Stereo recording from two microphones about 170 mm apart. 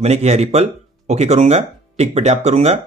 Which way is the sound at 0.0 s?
40° right (ahead or behind).